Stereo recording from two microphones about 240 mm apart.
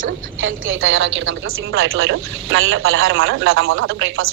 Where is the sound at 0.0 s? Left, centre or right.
Right.